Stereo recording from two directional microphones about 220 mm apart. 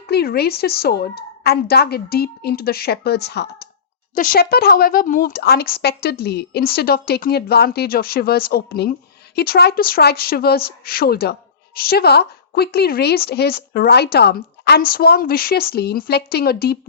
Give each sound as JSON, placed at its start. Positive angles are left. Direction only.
{"t": 0.1, "sound": "speech", "side_deg": 45}
{"t": 4.1, "sound": "speech", "side_deg": 40}